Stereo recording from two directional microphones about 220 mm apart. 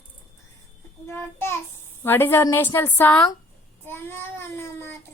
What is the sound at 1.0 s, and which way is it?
Child singing, 10° left (ahead or behind).